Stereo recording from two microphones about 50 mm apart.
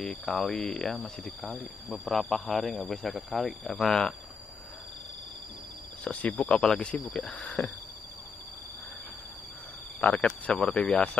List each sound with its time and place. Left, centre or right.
0.0 s speech: centre
1.9 s speech: centre
6.0 s speech: left
6.5 s speech: centre
9.9 s speech: left